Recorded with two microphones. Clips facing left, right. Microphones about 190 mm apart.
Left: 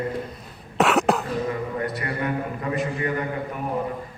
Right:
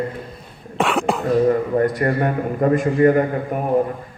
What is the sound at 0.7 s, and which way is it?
Cough, centre (ahead or behind).